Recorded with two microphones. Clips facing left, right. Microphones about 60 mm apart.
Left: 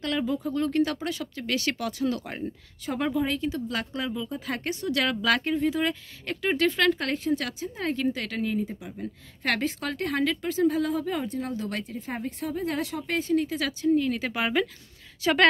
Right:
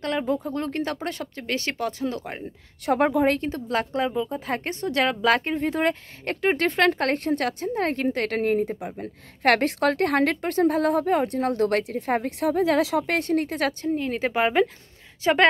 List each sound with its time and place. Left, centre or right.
0.0 s speech: right
1.4 s speech: right
2.8 s speech: right
5.6 s a woman's voice: right
13.8 s a woman's voice: right